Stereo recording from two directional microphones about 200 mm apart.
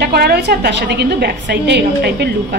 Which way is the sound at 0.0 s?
50° right (ahead or behind).